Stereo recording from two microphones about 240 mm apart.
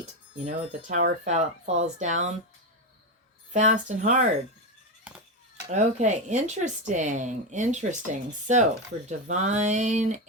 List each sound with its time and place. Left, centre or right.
0.3 s speech: right
3.5 s speech: right
5.1 s a sound: centre
5.7 s speech: right